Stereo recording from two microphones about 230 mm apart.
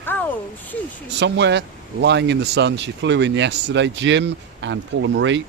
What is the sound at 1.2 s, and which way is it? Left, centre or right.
Speech, right.